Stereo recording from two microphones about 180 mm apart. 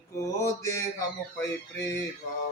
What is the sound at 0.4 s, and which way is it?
Speech, 15° left (ahead or behind).